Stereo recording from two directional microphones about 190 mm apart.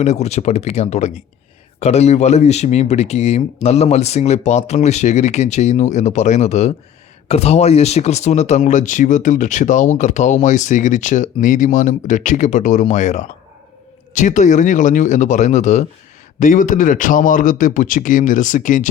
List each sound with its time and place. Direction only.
0.0 s a man's voice: 35° left (ahead or behind)